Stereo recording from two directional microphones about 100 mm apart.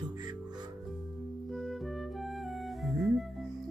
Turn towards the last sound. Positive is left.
turn(degrees=0)  # may be behind; listen again after turning